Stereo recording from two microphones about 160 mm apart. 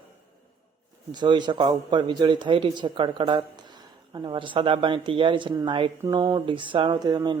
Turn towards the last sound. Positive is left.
turn(degrees=-25)  # may be behind; listen again after turning